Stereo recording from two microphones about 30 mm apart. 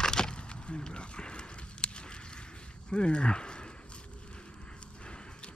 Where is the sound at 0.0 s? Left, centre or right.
Left.